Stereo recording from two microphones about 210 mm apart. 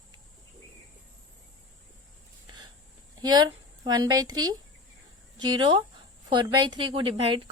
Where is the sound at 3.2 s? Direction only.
20° right (ahead or behind).